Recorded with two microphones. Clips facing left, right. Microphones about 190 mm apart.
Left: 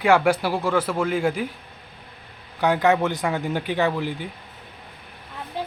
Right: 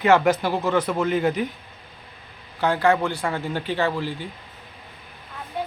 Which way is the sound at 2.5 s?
15° left (ahead or behind).